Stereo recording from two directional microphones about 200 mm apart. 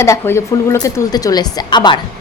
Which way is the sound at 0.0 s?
15° left (ahead or behind).